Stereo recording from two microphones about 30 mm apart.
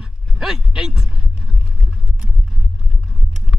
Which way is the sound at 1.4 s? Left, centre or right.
Centre.